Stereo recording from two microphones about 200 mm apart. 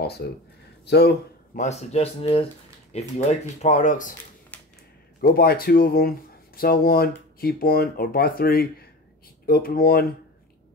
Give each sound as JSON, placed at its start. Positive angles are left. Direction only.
{"t": 0.8, "sound": "speech", "side_deg": 55}
{"t": 1.5, "sound": "speech", "side_deg": 35}
{"t": 4.5, "sound": "a sound", "side_deg": 5}
{"t": 5.2, "sound": "speech", "side_deg": 50}